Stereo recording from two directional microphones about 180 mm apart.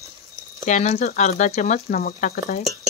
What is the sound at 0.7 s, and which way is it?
Speech, 40° left (ahead or behind).